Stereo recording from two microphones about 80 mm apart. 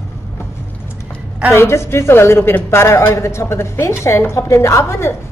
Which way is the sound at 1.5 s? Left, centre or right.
Left.